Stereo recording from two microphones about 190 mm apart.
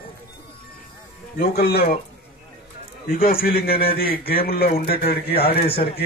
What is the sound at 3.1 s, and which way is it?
Speech, 50° left (ahead or behind).